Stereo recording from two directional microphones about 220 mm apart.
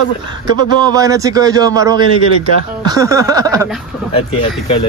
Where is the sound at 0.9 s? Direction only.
15° right (ahead or behind).